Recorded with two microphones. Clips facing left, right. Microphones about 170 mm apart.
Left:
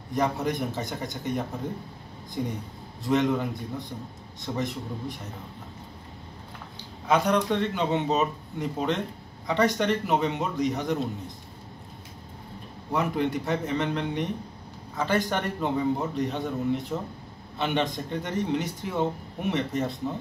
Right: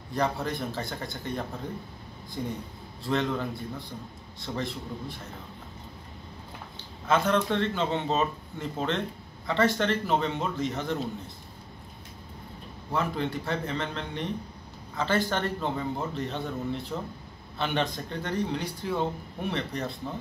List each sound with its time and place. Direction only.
0.1 s speech: 20° left (ahead or behind)
7.1 s speech: 15° left (ahead or behind)
12.9 s speech: 15° left (ahead or behind)
16.9 s speech: centre (ahead or behind)
17.6 s speech: 20° left (ahead or behind)